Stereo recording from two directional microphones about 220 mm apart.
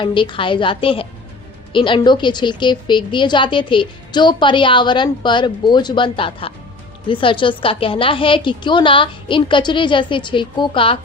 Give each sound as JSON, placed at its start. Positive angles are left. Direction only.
{"t": 0.0, "sound": "a woman's voice", "side_deg": 20}